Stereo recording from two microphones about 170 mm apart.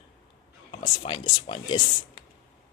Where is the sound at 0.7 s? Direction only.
30° left (ahead or behind).